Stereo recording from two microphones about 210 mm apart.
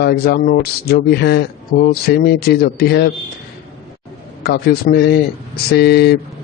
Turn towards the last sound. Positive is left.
turn(degrees=50)  # may be behind; listen again after turning